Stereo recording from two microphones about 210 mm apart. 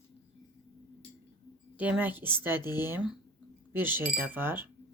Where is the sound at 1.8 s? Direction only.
5° right (ahead or behind).